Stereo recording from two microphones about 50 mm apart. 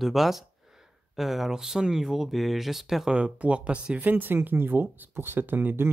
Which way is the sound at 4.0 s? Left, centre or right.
Right.